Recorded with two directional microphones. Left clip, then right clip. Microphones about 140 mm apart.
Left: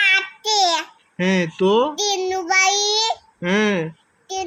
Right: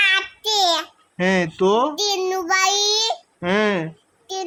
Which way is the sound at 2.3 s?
15° right (ahead or behind).